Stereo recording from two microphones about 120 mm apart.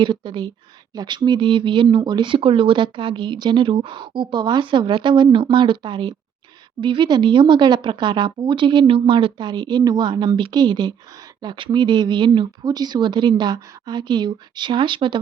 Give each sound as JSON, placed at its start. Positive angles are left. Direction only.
{"t": 0.0, "sound": "speech", "side_deg": -40}